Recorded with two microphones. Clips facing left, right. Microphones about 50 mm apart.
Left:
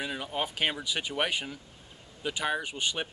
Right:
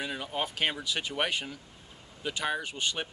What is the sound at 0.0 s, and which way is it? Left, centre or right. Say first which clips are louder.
Speech: left 1 dB; centre.